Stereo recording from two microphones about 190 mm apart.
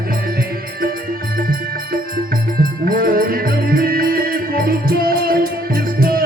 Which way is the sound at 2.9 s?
50° right (ahead or behind).